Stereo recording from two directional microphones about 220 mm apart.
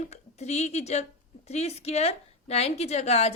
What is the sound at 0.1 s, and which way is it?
A woman's voice, 30° left (ahead or behind).